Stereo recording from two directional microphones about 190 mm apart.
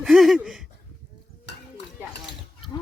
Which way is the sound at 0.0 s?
Centre (ahead or behind).